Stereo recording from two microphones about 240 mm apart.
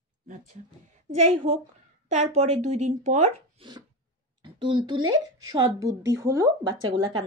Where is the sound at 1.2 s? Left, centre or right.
Right.